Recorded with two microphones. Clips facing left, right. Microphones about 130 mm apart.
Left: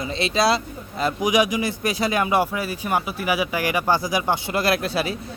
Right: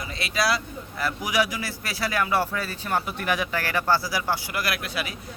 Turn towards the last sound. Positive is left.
turn(degrees=30)  # may be behind; listen again after turning